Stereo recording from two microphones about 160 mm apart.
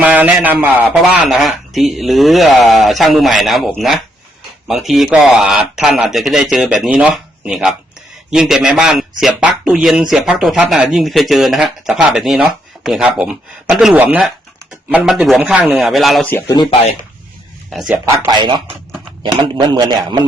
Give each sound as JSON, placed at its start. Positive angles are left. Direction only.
{"t": 0.0, "sound": "speech", "side_deg": -10}
{"t": 17.7, "sound": "speech", "side_deg": -5}
{"t": 17.9, "sound": "speech", "side_deg": -15}
{"t": 18.3, "sound": "a man's voice", "side_deg": -30}